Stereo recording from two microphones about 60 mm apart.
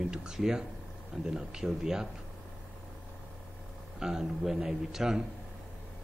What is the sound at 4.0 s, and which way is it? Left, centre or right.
Speech, centre.